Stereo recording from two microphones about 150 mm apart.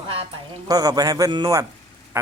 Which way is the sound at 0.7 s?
25° right (ahead or behind).